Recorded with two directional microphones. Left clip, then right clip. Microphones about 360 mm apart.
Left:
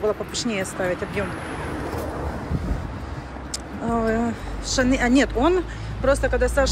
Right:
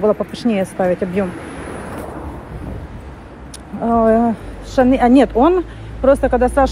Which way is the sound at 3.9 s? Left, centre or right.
Centre.